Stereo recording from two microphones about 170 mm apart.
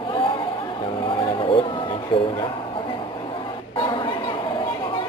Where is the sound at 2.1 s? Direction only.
30° left (ahead or behind).